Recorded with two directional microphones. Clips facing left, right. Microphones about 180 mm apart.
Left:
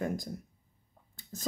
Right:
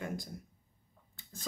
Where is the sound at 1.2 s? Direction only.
40° left (ahead or behind).